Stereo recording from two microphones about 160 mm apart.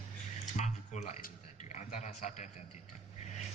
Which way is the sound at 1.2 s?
45° left (ahead or behind).